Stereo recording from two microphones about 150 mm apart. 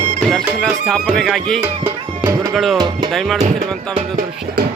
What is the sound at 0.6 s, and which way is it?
Music, 5° right (ahead or behind).